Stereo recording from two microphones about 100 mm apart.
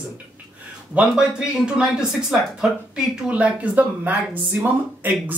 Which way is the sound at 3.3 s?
15° right (ahead or behind).